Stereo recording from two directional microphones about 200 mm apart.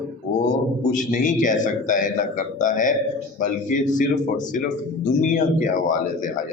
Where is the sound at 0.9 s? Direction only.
40° left (ahead or behind).